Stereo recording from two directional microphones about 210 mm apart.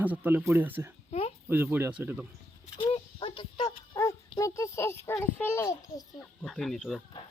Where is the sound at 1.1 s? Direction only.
30° left (ahead or behind).